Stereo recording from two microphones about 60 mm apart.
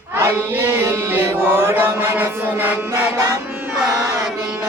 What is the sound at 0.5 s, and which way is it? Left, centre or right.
Music, right.